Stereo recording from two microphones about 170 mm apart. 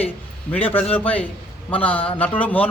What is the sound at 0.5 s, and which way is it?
A man's voice, 10° left (ahead or behind).